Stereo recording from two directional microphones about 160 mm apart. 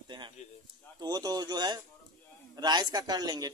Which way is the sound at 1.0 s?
25° right (ahead or behind).